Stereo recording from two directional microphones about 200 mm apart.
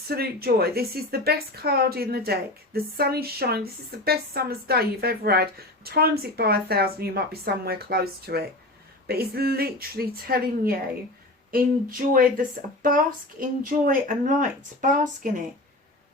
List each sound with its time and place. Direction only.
0.1 s a woman's voice: 50° right (ahead or behind)